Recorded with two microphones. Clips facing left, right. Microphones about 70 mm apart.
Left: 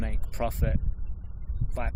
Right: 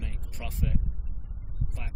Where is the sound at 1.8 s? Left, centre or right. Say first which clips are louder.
Left 11 dB; left.